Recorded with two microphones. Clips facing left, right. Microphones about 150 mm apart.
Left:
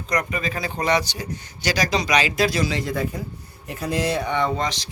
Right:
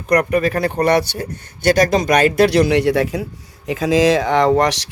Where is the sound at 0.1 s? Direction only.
60° right (ahead or behind); by 3.2 s 80° right.